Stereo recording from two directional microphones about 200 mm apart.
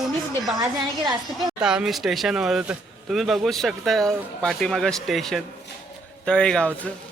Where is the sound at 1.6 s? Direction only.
5° right (ahead or behind).